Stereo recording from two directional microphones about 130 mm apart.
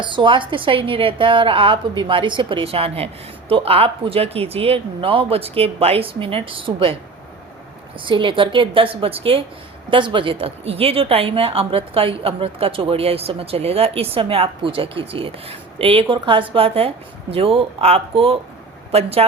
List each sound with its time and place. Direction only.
0.0 s a woman's voice: 40° right (ahead or behind)
8.0 s speech: 40° right (ahead or behind)